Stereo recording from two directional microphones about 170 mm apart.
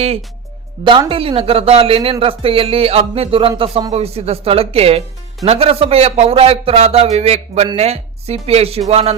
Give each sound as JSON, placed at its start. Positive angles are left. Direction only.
{"t": 0.9, "sound": "speech", "side_deg": -30}